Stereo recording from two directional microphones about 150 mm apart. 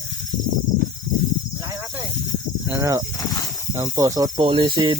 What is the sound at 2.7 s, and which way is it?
Speech, 20° right (ahead or behind).